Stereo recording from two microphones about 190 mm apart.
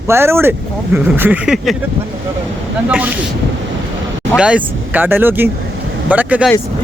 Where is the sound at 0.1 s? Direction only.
15° right (ahead or behind).